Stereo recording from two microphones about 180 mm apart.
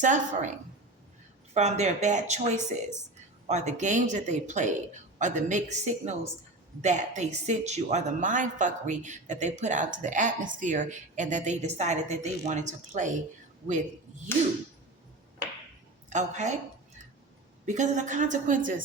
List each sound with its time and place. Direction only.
0.0 s a woman's voice: 45° right (ahead or behind)
1.5 s a woman's voice: 40° right (ahead or behind)
14.3 s a sound: 10° left (ahead or behind)
16.0 s a woman's voice: 40° right (ahead or behind)
17.7 s a woman's voice: 40° right (ahead or behind)